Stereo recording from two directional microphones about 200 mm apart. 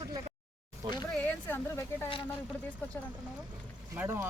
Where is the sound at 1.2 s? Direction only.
10° left (ahead or behind).